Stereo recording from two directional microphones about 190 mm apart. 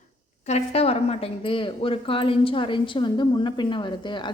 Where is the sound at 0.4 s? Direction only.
35° left (ahead or behind).